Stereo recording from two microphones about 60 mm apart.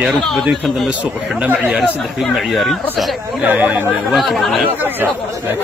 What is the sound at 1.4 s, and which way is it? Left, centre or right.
Speech, right.